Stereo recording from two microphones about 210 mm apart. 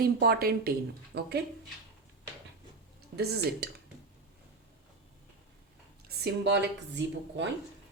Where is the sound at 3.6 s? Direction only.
50° right (ahead or behind).